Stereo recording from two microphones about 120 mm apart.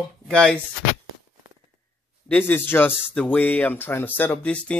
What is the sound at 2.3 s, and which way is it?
Speech, 15° left (ahead or behind).